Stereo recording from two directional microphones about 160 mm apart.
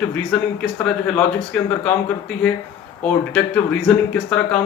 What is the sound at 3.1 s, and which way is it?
Speech, 10° left (ahead or behind).